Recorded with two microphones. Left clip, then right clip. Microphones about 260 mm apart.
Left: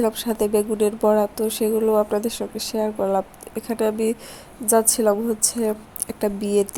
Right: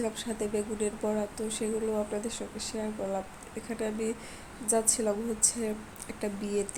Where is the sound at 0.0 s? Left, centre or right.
Left.